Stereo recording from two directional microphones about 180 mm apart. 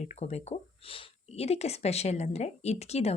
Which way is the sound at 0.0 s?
40° left (ahead or behind).